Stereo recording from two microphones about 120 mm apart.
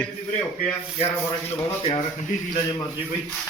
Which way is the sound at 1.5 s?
55° left (ahead or behind).